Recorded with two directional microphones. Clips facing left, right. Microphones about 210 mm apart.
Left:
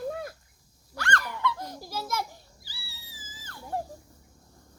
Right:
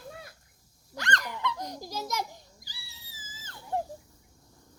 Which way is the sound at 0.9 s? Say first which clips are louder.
Left 2 dB; 20° right (ahead or behind).